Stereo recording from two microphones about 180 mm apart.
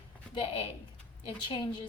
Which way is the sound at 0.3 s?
30° left (ahead or behind).